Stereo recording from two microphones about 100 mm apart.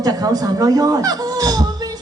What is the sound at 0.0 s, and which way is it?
A woman's voice, 40° right (ahead or behind).